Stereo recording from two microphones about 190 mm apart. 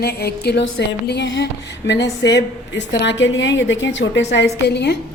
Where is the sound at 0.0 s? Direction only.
55° left (ahead or behind).